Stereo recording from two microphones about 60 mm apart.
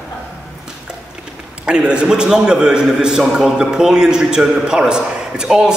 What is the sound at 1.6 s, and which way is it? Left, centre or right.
A man's voice, centre.